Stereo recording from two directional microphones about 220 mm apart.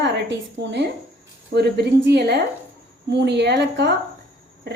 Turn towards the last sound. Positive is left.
turn(degrees=-50)  # may be behind; listen again after turning